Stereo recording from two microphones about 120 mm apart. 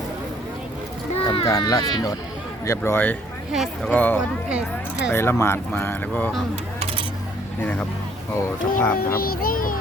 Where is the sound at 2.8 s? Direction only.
15° left (ahead or behind).